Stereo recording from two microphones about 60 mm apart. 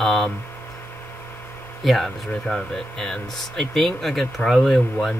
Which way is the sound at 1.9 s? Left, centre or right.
Centre.